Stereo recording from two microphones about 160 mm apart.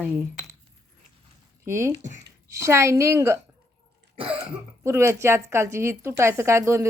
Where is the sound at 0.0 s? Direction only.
15° right (ahead or behind).